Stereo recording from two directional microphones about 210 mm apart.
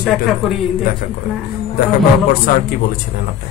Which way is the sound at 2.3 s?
45° left (ahead or behind).